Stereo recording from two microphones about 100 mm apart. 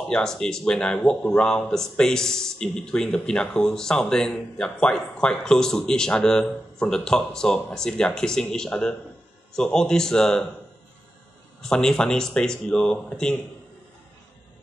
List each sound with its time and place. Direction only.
0.1 s speech: 5° left (ahead or behind)
11.6 s speech: 5° left (ahead or behind)